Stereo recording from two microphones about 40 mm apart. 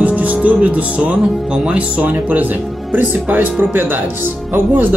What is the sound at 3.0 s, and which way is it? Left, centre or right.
Speech, right.